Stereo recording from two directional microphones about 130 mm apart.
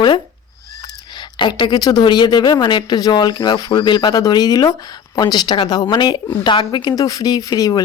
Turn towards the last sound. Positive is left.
turn(degrees=30)  # may be behind; listen again after turning